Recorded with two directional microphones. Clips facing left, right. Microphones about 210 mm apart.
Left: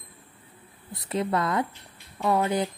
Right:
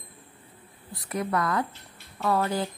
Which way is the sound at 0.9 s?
25° left (ahead or behind).